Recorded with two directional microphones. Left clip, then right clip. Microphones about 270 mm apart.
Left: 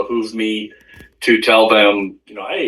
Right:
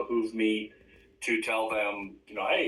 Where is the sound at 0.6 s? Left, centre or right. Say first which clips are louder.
Left 11 dB; left.